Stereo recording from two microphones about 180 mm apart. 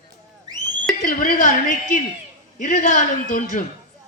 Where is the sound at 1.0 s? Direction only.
50° left (ahead or behind).